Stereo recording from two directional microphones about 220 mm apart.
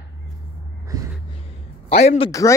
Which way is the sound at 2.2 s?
15° left (ahead or behind).